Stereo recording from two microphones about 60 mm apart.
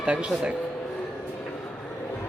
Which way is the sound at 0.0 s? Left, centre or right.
Right.